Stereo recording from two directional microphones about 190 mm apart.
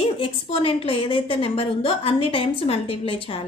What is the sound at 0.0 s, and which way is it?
A woman's voice, 30° left (ahead or behind).